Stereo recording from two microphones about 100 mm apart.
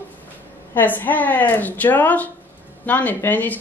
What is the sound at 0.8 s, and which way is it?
Speech, 20° left (ahead or behind).